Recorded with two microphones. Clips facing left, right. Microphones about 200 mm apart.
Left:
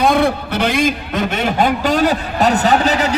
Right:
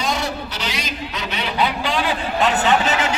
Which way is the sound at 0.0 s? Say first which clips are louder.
Left 10 dB; 55° left (ahead or behind).